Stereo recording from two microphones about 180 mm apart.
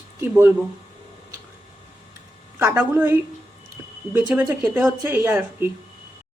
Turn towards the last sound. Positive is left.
turn(degrees=-10)  # may be behind; listen again after turning